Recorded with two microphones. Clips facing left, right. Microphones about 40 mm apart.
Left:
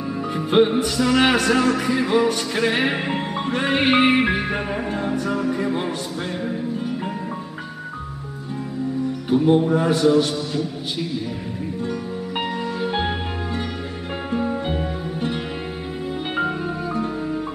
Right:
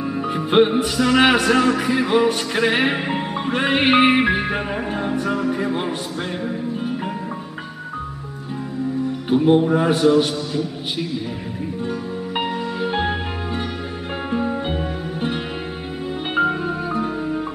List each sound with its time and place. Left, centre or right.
0.0 s music: right
9.3 s music: right
10.3 s a man's voice: centre
11.9 s music: centre
14.3 s music: centre